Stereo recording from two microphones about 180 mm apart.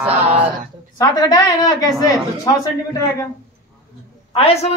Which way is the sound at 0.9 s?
20° left (ahead or behind).